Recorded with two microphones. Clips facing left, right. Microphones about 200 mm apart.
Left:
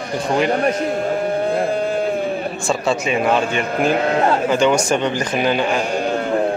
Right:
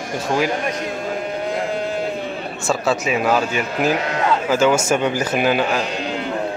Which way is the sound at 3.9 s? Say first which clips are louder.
Left 3 dB; 50° left (ahead or behind).